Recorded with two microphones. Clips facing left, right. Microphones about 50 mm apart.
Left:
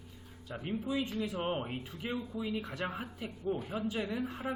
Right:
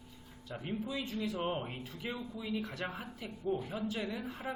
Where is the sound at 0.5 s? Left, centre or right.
Centre.